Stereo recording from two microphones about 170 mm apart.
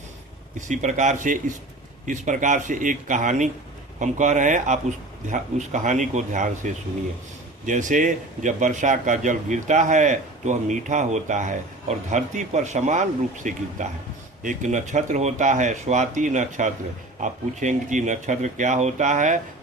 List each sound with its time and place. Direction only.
0.7 s speech: 45° right (ahead or behind)
7.6 s speech: 50° right (ahead or behind)